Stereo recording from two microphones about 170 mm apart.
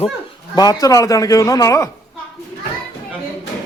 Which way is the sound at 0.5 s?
25° left (ahead or behind).